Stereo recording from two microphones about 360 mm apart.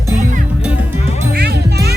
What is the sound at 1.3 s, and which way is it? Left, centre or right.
Music, right.